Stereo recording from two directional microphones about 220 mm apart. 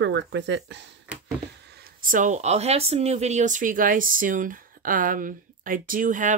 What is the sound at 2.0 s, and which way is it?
Speech, 35° right (ahead or behind).